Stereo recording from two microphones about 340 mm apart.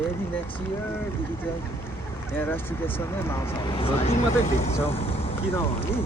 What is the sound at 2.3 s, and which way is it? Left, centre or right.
Speech, centre.